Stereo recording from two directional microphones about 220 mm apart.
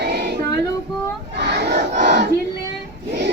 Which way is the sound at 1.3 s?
50° right (ahead or behind).